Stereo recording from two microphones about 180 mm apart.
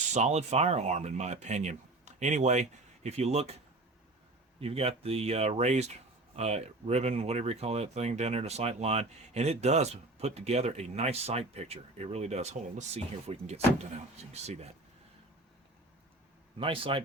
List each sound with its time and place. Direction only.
0.1 s speech: 40° right (ahead or behind)
4.6 s speech: 35° right (ahead or behind)
16.6 s speech: 30° right (ahead or behind)